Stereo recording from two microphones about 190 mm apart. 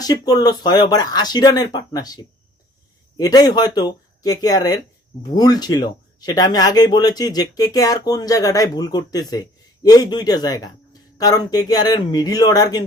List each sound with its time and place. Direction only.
0.0 s speech: 20° left (ahead or behind)